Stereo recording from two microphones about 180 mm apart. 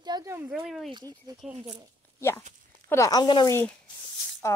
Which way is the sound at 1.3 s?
20° right (ahead or behind).